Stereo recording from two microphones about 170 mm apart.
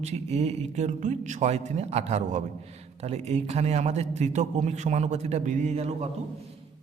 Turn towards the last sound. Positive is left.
turn(degrees=-40)  # may be behind; listen again after turning